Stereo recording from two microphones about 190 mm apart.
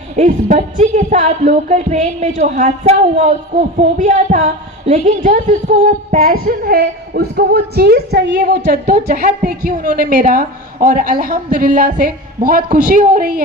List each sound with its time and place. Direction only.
0.2 s speech: 45° right (ahead or behind)
6.2 s a woman's voice: 55° right (ahead or behind)
8.9 s a woman's voice: 50° right (ahead or behind)